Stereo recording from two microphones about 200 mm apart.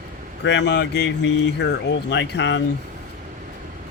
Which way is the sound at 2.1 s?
60° left (ahead or behind).